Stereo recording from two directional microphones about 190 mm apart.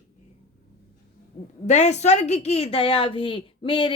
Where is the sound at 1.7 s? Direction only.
35° left (ahead or behind).